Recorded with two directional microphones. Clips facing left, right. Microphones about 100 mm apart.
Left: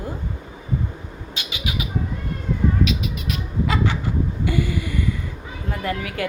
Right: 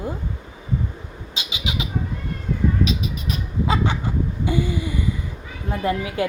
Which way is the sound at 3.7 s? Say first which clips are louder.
Right 1 dB; 20° right (ahead or behind).